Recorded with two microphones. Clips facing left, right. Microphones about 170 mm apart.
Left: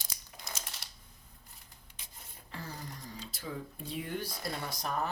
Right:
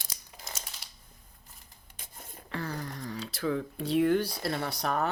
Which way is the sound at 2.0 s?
50° right (ahead or behind).